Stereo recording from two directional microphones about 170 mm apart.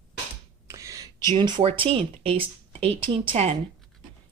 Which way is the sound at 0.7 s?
20° right (ahead or behind).